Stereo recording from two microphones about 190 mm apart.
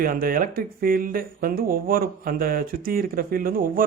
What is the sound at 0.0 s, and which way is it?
Speech, 50° right (ahead or behind).